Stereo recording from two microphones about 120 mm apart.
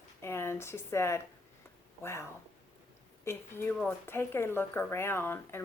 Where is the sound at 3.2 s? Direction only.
20° left (ahead or behind).